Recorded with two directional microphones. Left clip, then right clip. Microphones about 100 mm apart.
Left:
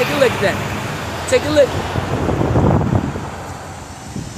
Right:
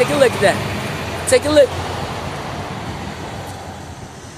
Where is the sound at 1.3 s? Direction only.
5° left (ahead or behind).